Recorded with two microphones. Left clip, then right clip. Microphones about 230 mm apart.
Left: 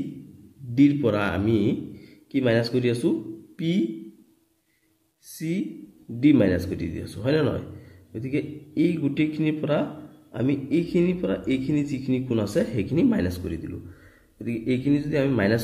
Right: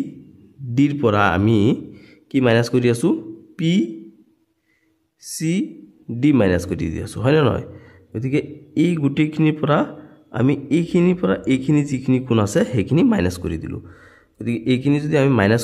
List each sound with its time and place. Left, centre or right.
0.7 s a man's voice: right
5.4 s speech: right